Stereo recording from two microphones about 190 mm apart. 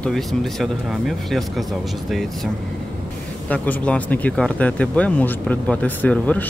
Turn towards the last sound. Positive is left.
turn(degrees=5)  # may be behind; listen again after turning